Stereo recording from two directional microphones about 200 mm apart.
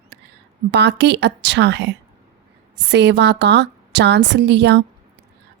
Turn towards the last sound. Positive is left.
turn(degrees=-60)  # may be behind; listen again after turning